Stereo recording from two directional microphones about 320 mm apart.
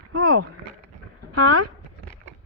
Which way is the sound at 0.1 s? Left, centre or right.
Right.